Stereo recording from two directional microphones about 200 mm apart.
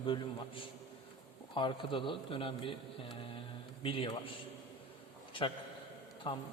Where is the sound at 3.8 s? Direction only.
25° left (ahead or behind).